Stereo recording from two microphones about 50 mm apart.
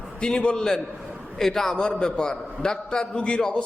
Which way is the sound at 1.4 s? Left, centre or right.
Centre.